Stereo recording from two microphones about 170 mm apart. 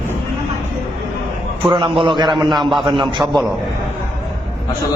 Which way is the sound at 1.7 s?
30° right (ahead or behind).